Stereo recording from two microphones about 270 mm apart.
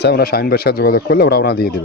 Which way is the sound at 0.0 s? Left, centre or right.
Left.